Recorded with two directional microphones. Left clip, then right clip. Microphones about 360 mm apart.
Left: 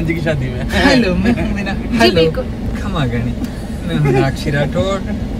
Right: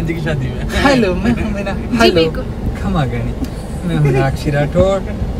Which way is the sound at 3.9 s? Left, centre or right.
Centre.